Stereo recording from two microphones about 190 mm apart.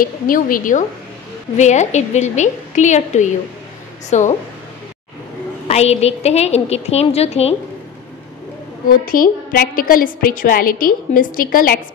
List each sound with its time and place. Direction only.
0.0 s a woman's voice: 45° left (ahead or behind)
5.7 s a woman's voice: 35° left (ahead or behind)
8.8 s a woman's voice: 45° left (ahead or behind)